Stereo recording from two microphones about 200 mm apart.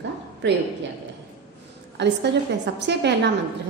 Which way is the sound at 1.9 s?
60° right (ahead or behind).